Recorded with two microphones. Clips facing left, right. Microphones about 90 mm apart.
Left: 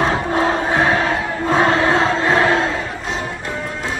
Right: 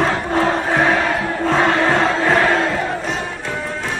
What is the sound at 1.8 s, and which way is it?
Music, 15° left (ahead or behind).